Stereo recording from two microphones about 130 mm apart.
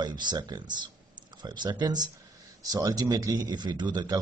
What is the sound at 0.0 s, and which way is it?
A man's voice, 35° right (ahead or behind).